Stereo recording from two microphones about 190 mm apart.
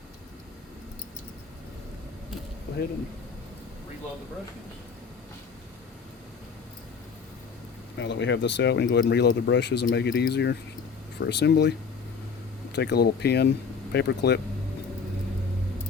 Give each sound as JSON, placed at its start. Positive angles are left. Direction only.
{"t": 7.9, "sound": "speech", "side_deg": 70}
{"t": 12.7, "sound": "speech", "side_deg": 60}